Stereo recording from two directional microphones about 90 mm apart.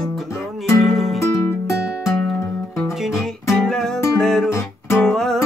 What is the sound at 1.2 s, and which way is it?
Music, 30° left (ahead or behind).